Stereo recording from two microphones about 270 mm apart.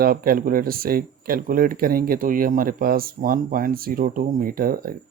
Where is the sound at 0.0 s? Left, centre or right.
Right.